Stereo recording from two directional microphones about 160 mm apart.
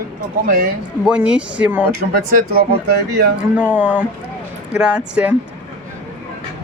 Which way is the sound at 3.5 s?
10° right (ahead or behind).